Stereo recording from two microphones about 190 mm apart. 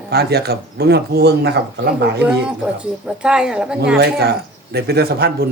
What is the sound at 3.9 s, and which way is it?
Speech, 60° right (ahead or behind).